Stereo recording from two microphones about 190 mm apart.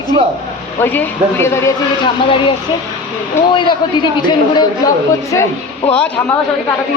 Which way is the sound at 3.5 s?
25° left (ahead or behind).